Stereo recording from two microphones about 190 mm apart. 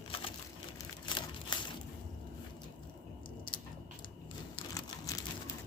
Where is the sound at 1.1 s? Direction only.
25° left (ahead or behind).